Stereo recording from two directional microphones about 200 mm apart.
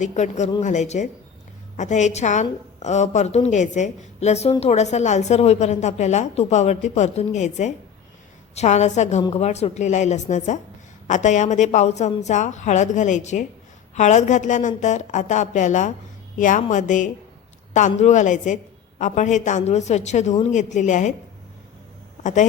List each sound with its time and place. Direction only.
0.0 s a woman's voice: 35° left (ahead or behind)
22.2 s speech: 35° left (ahead or behind)